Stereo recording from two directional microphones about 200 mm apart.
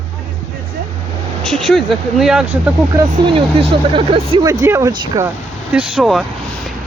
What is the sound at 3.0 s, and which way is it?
Speech, 25° right (ahead or behind).